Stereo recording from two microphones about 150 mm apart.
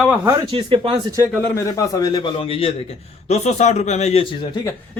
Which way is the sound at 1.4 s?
20° left (ahead or behind).